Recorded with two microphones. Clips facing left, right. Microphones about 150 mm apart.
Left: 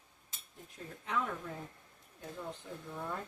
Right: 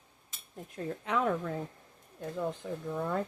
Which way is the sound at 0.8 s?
80° right.